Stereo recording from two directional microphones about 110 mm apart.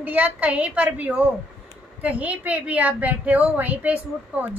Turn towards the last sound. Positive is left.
turn(degrees=-15)  # may be behind; listen again after turning